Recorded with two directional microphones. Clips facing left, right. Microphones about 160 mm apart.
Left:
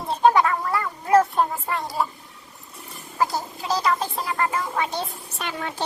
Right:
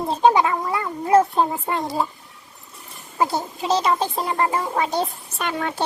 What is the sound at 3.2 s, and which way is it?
Speech, 25° right (ahead or behind).